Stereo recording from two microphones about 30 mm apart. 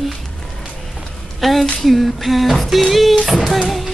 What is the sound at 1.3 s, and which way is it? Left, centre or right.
Speech, centre.